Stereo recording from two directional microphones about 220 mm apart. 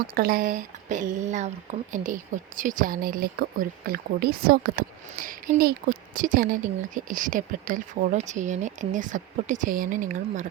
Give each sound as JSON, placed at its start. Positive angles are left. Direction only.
{"t": 0.0, "sound": "speech", "side_deg": -40}